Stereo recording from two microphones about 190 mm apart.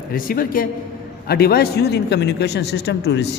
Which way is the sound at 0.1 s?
50° left (ahead or behind).